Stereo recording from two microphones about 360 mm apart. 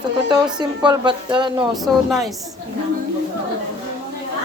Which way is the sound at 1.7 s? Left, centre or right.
Centre.